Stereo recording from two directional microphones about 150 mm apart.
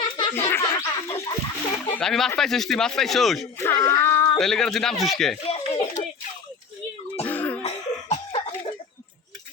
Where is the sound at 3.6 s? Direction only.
20° left (ahead or behind).